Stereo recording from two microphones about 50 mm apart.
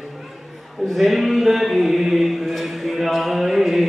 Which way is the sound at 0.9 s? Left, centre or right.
Centre.